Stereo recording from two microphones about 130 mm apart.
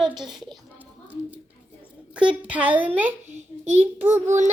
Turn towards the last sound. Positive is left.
turn(degrees=-15)  # may be behind; listen again after turning